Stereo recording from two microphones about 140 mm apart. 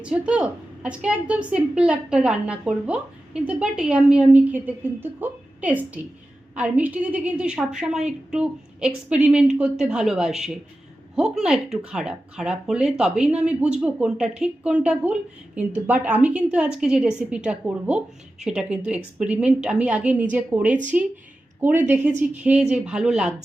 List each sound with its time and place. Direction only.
0.0 s a woman's voice: 10° right (ahead or behind)